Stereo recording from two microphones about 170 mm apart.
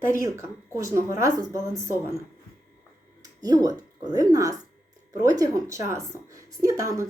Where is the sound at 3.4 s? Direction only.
20° right (ahead or behind).